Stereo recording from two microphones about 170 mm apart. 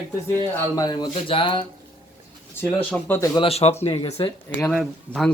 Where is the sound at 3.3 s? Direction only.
35° left (ahead or behind).